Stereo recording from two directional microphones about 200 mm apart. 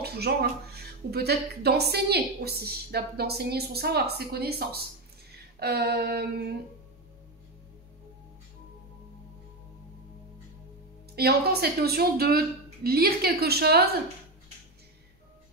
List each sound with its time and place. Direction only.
0.0 s a sound: 55° right (ahead or behind)
1.1 s a woman's voice: 55° right (ahead or behind)
11.1 s a woman's voice: 50° right (ahead or behind)